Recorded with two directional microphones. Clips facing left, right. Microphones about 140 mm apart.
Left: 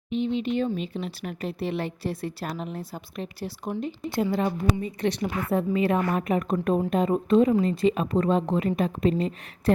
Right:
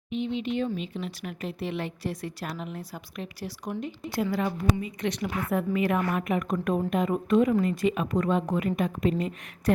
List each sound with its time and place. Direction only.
0.1 s speech: 35° left (ahead or behind)